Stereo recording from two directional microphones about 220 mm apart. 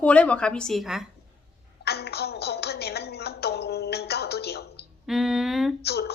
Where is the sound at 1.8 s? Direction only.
45° left (ahead or behind).